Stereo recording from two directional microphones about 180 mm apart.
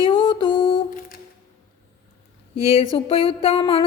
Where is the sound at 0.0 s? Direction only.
30° left (ahead or behind).